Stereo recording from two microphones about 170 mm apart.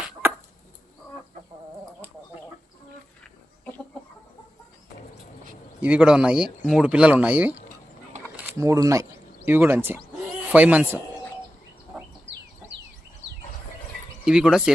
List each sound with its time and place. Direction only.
0.0 s a sound: 10° right (ahead or behind)
5.8 s speech: 5° right (ahead or behind)
14.3 s speech: 5° right (ahead or behind)